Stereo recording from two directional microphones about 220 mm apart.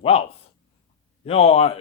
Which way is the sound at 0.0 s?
25° left (ahead or behind).